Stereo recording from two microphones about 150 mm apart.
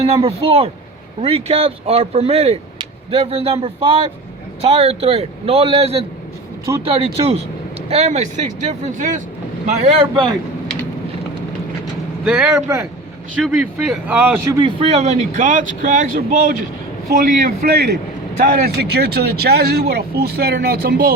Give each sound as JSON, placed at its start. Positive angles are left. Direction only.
{"t": 0.0, "sound": "a man's voice", "side_deg": -40}
{"t": 9.6, "sound": "a man's voice", "side_deg": -45}
{"t": 12.2, "sound": "a man's voice", "side_deg": -5}
{"t": 12.5, "sound": "speech", "side_deg": -15}
{"t": 13.4, "sound": "a man's voice", "side_deg": 0}
{"t": 14.5, "sound": "a man's voice", "side_deg": -30}
{"t": 14.8, "sound": "speech", "side_deg": -45}
{"t": 17.1, "sound": "a man's voice", "side_deg": -80}